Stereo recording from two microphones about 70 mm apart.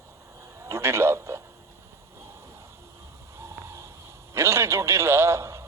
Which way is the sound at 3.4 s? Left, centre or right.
Right.